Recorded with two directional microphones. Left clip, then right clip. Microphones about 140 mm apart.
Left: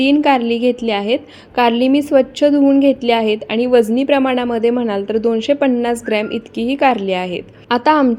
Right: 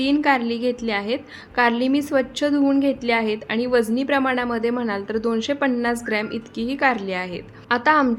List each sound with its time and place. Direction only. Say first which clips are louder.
0.0 s a woman's voice: left 6 dB; 15° left (ahead or behind)